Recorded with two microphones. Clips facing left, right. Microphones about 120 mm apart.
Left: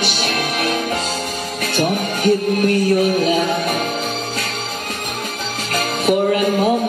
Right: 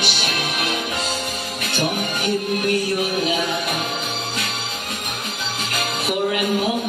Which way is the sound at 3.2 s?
40° left (ahead or behind).